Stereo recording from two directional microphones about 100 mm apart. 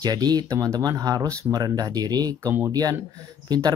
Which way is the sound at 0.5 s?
30° right (ahead or behind).